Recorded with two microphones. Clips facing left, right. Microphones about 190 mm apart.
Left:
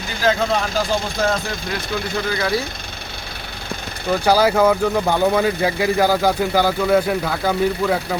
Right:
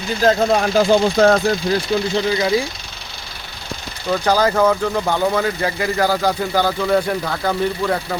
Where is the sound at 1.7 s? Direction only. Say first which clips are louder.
Right 6 dB; 25° right (ahead or behind).